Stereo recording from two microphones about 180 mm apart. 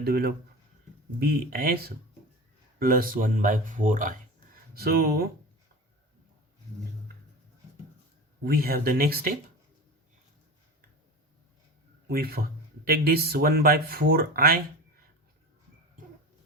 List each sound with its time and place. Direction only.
0.0 s speech: 55° right (ahead or behind)
4.7 s speech: 60° right (ahead or behind)
8.4 s speech: 55° right (ahead or behind)
12.0 s speech: 55° right (ahead or behind)